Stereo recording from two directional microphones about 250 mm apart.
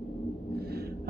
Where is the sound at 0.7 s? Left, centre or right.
Right.